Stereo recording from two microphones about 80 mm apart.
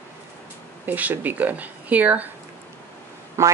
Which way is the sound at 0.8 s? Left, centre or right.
Right.